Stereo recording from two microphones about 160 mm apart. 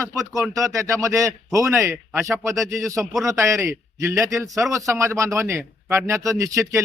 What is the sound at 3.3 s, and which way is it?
A man's voice, 20° right (ahead or behind).